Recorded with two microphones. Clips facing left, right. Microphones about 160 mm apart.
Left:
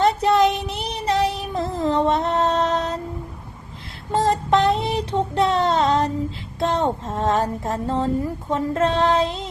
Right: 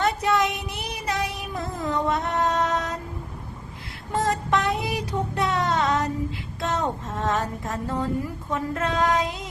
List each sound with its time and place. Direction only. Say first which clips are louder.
0.0 s child singing: left 6 dB; 30° left (ahead or behind)
4.1 s child singing: left 5 dB; 30° left (ahead or behind)
6.6 s speech: left 5 dB; 30° left (ahead or behind)